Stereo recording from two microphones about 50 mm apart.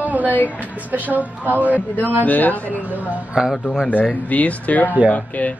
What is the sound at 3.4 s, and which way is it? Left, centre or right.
Speech, centre.